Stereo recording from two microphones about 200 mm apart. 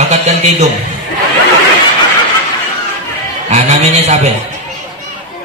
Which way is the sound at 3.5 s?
35° right (ahead or behind).